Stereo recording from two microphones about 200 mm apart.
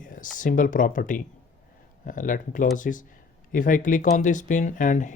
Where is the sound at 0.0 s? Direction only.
40° left (ahead or behind).